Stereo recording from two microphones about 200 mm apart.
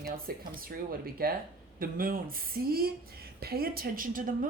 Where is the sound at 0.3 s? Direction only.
50° right (ahead or behind).